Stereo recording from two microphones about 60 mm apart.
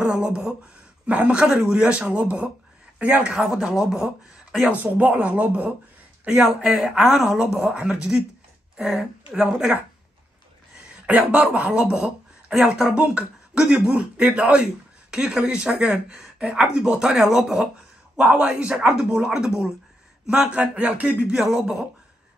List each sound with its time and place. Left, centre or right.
0.0 s a man's voice: centre
3.3 s a woman's voice: centre
4.6 s a man's voice: right
6.7 s a woman's voice: centre
11.1 s a man's voice: right; by 17.6 s centre
18.1 s a man's voice: centre
21.3 s speech: centre